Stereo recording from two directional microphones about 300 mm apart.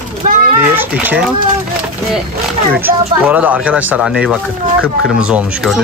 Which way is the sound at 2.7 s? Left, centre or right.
Centre.